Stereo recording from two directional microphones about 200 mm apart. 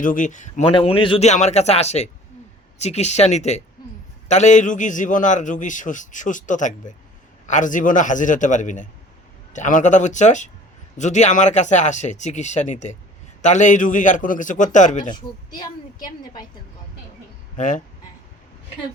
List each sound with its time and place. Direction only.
0.0 s a man's voice: 40° left (ahead or behind)
0.7 s a man's voice: 25° left (ahead or behind)
15.1 s speech: 20° left (ahead or behind)
17.6 s a man's voice: 40° left (ahead or behind)